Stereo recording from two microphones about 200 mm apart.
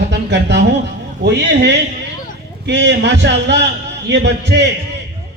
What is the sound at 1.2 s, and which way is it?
Speech, 60° right (ahead or behind).